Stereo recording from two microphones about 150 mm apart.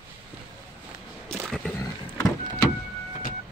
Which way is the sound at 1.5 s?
Centre (ahead or behind).